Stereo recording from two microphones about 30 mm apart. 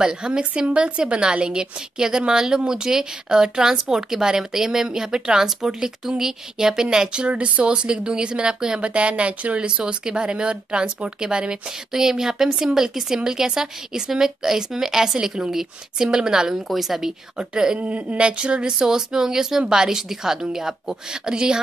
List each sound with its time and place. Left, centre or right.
0.0 s a woman's voice: right
7.3 s a woman's voice: right
7.6 s speech: right
8.8 s a woman's voice: right
11.9 s a woman's voice: centre
16.6 s a woman's voice: centre
17.4 s a woman's voice: right
17.7 s a woman's voice: right
18.2 s a woman's voice: right